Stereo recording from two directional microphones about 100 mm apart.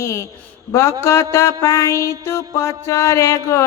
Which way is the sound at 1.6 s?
35° left (ahead or behind).